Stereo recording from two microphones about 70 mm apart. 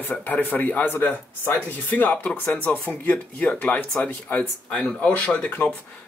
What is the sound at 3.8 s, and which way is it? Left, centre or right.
Speech, centre.